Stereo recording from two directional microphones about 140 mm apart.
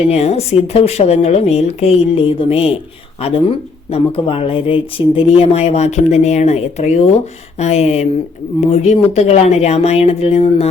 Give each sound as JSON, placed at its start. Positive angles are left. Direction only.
{"t": 0.1, "sound": "speech", "side_deg": 50}